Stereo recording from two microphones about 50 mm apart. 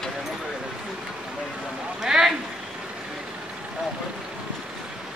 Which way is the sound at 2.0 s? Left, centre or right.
Centre.